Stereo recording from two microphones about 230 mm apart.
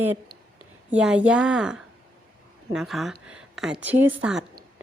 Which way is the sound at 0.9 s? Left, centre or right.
Centre.